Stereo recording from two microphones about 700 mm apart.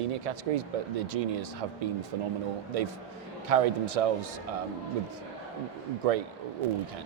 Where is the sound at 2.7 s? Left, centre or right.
Right.